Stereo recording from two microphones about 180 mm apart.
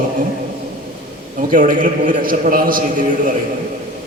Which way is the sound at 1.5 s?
50° right (ahead or behind).